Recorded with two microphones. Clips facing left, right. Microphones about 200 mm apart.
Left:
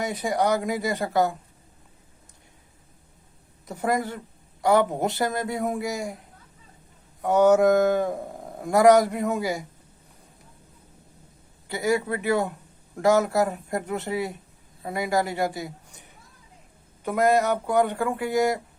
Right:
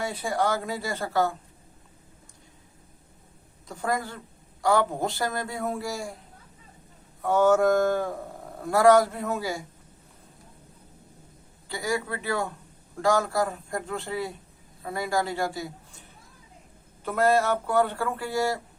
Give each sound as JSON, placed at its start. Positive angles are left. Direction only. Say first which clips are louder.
{"t": 0.0, "sound": "a man's voice", "louder": "left 3 dB", "side_deg": 20}
{"t": 3.7, "sound": "a man's voice", "louder": "left 4 dB", "side_deg": 20}
{"t": 7.2, "sound": "a man's voice", "louder": "left 3 dB", "side_deg": 20}
{"t": 11.7, "sound": "a man's voice", "louder": "left 5 dB", "side_deg": 20}